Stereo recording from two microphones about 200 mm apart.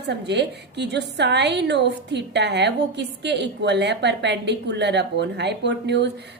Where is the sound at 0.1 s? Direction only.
60° right (ahead or behind).